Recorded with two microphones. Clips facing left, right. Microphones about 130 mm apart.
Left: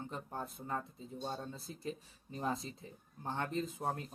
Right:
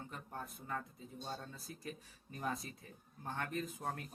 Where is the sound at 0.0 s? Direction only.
25° left (ahead or behind).